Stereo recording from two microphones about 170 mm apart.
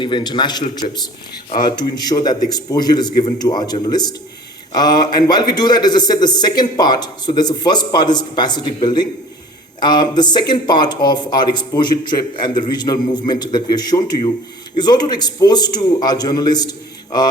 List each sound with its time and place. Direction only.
0.0 s speech: 30° left (ahead or behind)
0.8 s a man's voice: 45° left (ahead or behind)
1.5 s speech: 25° left (ahead or behind)